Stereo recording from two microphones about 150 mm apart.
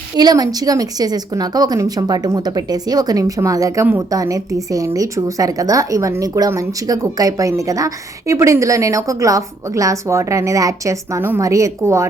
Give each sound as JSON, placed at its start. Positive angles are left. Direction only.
{"t": 0.2, "sound": "speech", "side_deg": -25}